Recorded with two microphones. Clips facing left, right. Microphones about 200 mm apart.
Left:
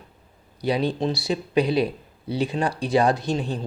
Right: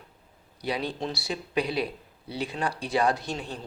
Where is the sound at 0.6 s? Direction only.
25° left (ahead or behind).